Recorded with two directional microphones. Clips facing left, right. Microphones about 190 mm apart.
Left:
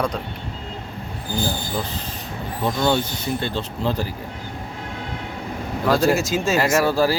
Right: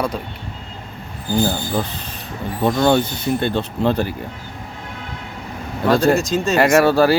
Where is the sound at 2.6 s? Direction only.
55° right (ahead or behind).